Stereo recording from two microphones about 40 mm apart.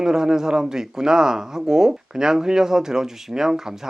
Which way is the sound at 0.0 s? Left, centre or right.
Centre.